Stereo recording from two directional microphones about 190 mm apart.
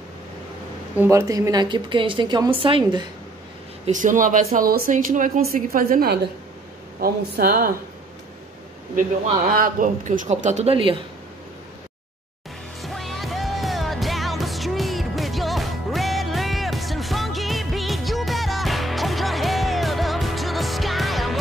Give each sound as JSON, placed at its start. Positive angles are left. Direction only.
{"t": 0.9, "sound": "a woman's voice", "side_deg": -15}
{"t": 3.8, "sound": "speech", "side_deg": -40}
{"t": 9.6, "sound": "speech", "side_deg": -45}
{"t": 12.8, "sound": "music", "side_deg": 0}